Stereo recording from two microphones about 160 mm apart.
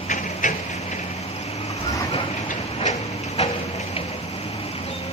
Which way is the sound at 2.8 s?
40° left (ahead or behind).